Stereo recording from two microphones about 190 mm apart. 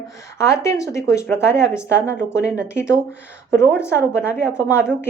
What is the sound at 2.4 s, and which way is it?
Speech, 5° right (ahead or behind).